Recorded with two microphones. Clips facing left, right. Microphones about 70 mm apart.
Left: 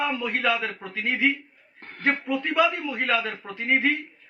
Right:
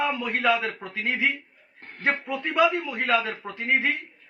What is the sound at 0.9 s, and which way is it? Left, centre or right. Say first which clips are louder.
A man's voice: left 3 dB; centre.